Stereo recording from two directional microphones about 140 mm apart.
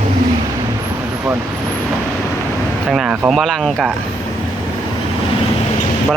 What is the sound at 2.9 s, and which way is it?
Speech, 5° right (ahead or behind).